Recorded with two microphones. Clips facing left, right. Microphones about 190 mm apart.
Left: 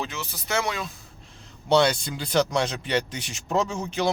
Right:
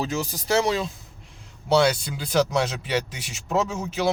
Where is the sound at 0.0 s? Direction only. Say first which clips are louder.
Right 6 dB; 40° right (ahead or behind).